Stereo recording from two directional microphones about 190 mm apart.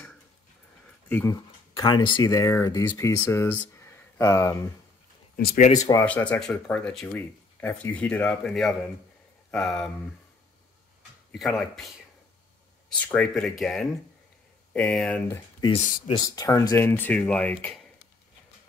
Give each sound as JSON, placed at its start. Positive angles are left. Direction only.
{"t": 1.0, "sound": "speech", "side_deg": 10}
{"t": 5.3, "sound": "speech", "side_deg": 50}
{"t": 5.8, "sound": "speech", "side_deg": 20}
{"t": 11.3, "sound": "speech", "side_deg": 0}
{"t": 13.0, "sound": "speech", "side_deg": 5}